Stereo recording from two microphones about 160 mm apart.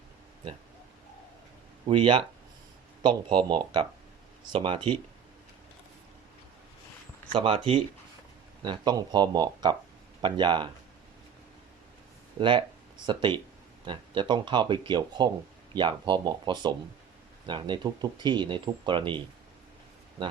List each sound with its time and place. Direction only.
1.9 s speech: 35° right (ahead or behind)
7.3 s speech: 35° right (ahead or behind)
12.4 s speech: 30° right (ahead or behind)